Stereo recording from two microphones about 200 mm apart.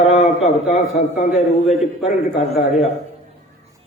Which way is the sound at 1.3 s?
Centre (ahead or behind).